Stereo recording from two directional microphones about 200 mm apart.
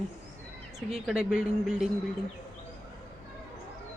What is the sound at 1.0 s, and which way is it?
Speech, 5° right (ahead or behind).